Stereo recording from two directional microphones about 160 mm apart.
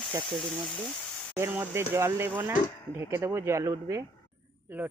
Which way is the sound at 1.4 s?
15° right (ahead or behind).